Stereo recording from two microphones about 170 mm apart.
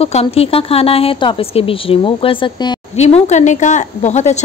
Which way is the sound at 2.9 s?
40° left (ahead or behind).